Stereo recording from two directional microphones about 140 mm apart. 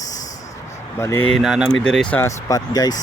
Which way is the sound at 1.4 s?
Centre (ahead or behind).